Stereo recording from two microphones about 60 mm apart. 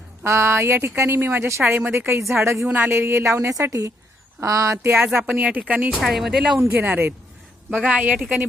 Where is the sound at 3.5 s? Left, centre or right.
Right.